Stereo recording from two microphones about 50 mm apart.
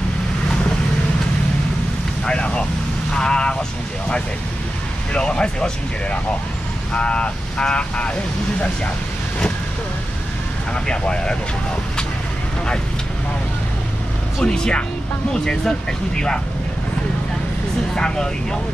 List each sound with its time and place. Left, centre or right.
2.2 s vehicle: centre
5.1 s speech: centre
10.7 s speech: centre
14.4 s speech: centre
17.9 s speech: centre